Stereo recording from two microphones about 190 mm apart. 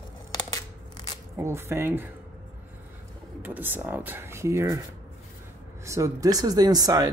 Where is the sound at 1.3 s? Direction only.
15° right (ahead or behind).